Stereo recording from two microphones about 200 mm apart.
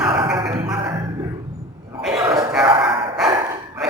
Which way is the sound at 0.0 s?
25° right (ahead or behind).